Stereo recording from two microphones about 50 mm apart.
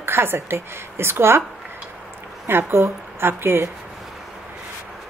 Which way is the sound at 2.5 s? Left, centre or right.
Right.